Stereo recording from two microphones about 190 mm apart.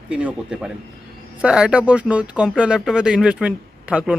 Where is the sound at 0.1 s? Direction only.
5° right (ahead or behind).